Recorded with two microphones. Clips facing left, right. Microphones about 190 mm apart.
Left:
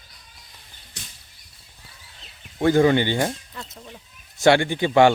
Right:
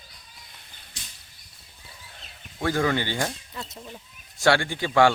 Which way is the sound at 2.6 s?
25° left (ahead or behind).